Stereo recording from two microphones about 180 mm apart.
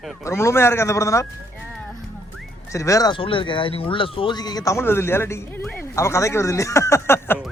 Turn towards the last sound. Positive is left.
turn(degrees=10)  # may be behind; listen again after turning